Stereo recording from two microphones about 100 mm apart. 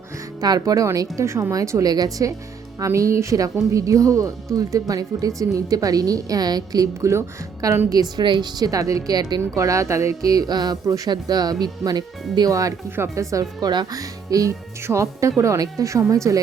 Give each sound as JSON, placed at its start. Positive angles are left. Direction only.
{"t": 0.3, "sound": "speech", "side_deg": -40}
{"t": 7.1, "sound": "a woman's voice", "side_deg": -30}
{"t": 7.9, "sound": "speech", "side_deg": -45}